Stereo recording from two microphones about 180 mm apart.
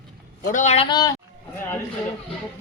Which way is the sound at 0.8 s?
25° left (ahead or behind).